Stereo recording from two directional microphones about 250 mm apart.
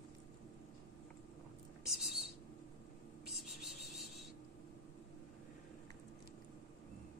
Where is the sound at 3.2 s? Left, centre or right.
Centre.